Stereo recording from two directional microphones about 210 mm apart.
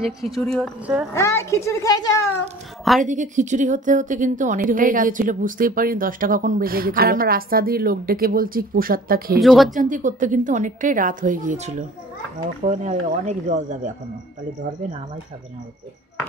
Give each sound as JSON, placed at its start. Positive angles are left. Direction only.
{"t": 0.2, "sound": "a woman's voice", "side_deg": 0}
{"t": 1.1, "sound": "a woman's voice", "side_deg": 15}
{"t": 3.0, "sound": "a woman's voice", "side_deg": -35}
{"t": 9.4, "sound": "a woman's voice", "side_deg": 0}
{"t": 9.8, "sound": "a woman's voice", "side_deg": -40}